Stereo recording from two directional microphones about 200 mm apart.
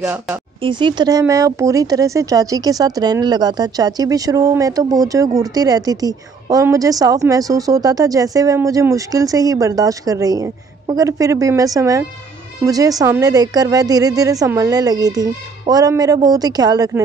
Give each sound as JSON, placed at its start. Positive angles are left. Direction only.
{"t": 0.0, "sound": "speech", "side_deg": -10}
{"t": 0.6, "sound": "a woman's voice", "side_deg": -25}